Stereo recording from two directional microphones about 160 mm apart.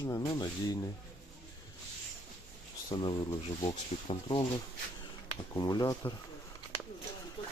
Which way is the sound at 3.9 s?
45° left (ahead or behind).